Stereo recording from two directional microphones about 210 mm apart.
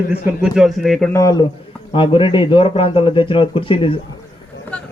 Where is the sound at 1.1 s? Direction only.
15° left (ahead or behind).